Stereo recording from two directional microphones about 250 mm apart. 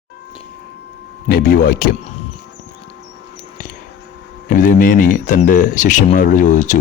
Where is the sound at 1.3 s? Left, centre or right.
Left.